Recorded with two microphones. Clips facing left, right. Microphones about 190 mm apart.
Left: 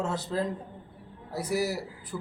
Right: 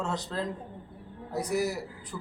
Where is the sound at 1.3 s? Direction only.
5° left (ahead or behind).